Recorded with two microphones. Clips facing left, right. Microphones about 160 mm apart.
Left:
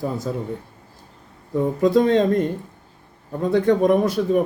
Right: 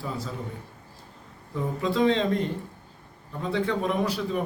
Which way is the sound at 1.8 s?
45° left (ahead or behind).